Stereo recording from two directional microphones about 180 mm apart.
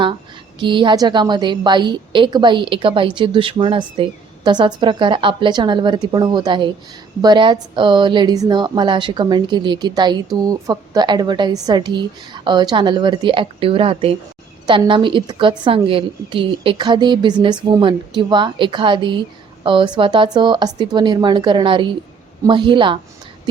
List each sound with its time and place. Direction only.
0.6 s a woman's voice: 25° right (ahead or behind)